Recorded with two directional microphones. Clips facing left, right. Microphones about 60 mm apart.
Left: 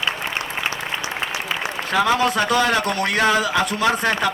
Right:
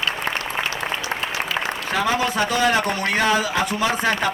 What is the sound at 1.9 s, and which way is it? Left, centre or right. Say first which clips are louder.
A man's voice: left 4 dB; left.